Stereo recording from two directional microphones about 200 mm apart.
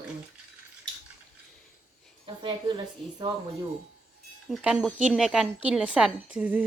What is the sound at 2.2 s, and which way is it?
A woman's voice, 25° right (ahead or behind).